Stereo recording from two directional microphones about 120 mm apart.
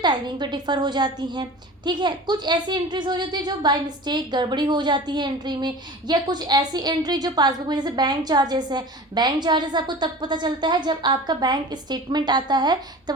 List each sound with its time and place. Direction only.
0.0 s a woman's voice: 40° right (ahead or behind)